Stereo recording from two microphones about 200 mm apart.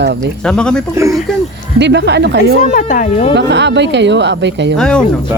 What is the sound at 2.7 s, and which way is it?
Speech, 40° left (ahead or behind).